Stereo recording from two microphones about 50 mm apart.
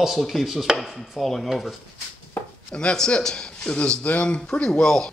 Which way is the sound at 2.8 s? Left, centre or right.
Left.